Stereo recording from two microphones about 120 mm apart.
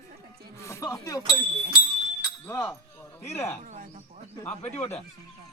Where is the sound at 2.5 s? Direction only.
25° left (ahead or behind).